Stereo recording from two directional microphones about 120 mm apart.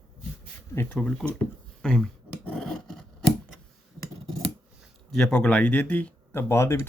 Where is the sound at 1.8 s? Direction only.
5° left (ahead or behind).